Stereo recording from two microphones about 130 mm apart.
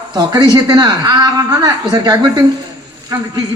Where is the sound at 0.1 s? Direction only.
35° right (ahead or behind).